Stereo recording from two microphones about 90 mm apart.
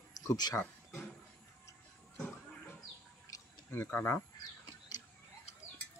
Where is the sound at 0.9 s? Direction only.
5° left (ahead or behind).